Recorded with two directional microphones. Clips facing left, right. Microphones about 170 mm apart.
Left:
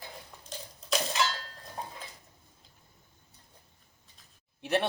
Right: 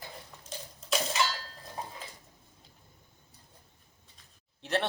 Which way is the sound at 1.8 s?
5° right (ahead or behind).